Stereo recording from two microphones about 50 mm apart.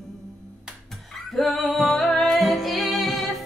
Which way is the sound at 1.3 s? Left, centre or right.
Centre.